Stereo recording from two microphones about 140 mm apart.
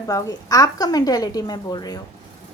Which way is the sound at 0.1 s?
25° left (ahead or behind).